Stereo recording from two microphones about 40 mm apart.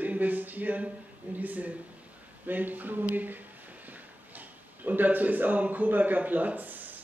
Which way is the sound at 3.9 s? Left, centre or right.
Right.